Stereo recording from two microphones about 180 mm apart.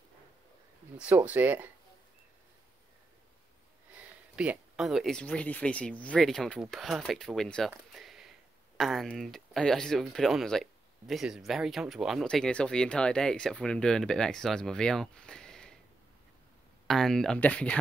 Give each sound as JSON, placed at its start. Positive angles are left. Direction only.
{"t": 0.9, "sound": "speech", "side_deg": -10}
{"t": 3.9, "sound": "speech", "side_deg": -10}
{"t": 7.9, "sound": "a sound", "side_deg": 0}
{"t": 8.7, "sound": "speech", "side_deg": 0}
{"t": 16.8, "sound": "speech", "side_deg": 0}